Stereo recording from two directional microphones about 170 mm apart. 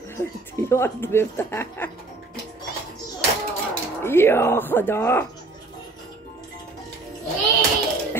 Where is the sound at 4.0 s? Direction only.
15° left (ahead or behind).